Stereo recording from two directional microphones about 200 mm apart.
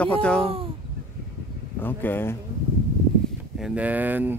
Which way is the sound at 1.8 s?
10° left (ahead or behind).